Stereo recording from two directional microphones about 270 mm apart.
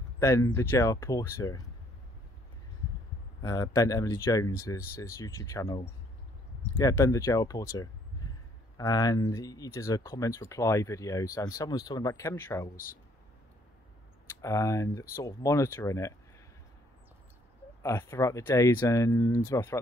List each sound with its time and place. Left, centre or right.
0.2 s speech: centre
3.4 s speech: centre
12.7 s speech: left
14.4 s speech: centre
17.8 s speech: centre